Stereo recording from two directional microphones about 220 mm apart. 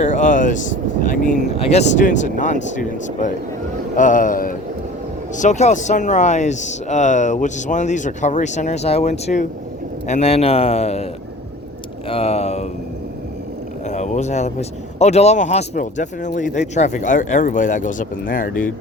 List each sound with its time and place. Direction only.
0.0 s a man's voice: 35° left (ahead or behind)
12.0 s a sound: 25° left (ahead or behind)
13.8 s speech: 30° left (ahead or behind)